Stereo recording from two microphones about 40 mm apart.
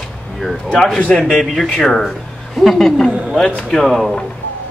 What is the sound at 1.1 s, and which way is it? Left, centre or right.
Speech, left.